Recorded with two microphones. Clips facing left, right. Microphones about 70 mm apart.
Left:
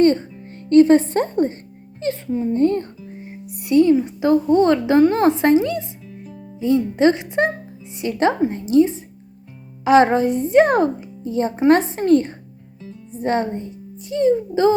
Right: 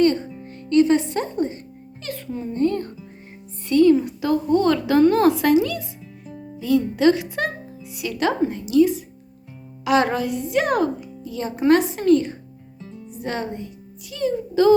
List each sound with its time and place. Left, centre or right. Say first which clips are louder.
0.0 s music: left 3 dB; left
0.7 s speech: left 5 dB; left
2.0 s a woman's voice: left 8 dB; left
3.7 s a woman's voice: left 1 dB; centre